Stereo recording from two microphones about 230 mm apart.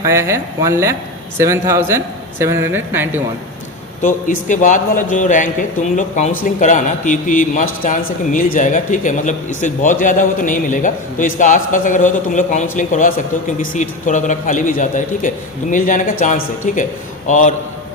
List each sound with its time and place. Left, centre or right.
0.0 s speech: centre
4.0 s a man's voice: left